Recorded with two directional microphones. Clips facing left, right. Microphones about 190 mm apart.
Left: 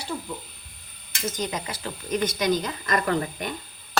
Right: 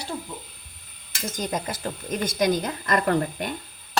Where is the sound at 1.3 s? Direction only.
50° right (ahead or behind).